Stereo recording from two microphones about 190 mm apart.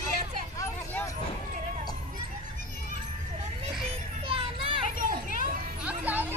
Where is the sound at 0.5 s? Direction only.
15° left (ahead or behind).